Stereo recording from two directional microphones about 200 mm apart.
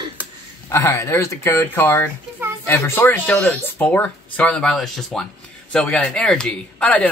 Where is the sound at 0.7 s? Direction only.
15° left (ahead or behind).